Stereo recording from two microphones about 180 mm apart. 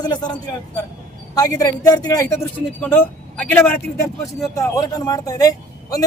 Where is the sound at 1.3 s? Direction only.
20° left (ahead or behind).